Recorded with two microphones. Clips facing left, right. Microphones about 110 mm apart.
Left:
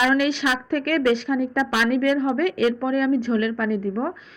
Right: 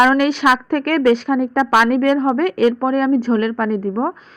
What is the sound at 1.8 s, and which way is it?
A woman's voice, 50° right (ahead or behind).